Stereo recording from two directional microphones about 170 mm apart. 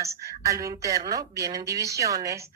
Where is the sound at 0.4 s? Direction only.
20° right (ahead or behind).